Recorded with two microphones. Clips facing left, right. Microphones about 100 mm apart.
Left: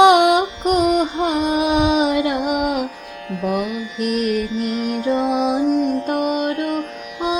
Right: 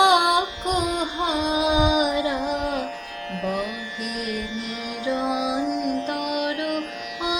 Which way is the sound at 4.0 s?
70° left (ahead or behind).